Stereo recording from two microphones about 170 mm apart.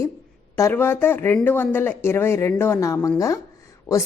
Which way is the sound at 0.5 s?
15° left (ahead or behind).